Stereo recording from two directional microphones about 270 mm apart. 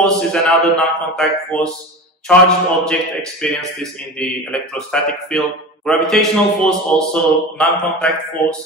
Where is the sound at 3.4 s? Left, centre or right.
Centre.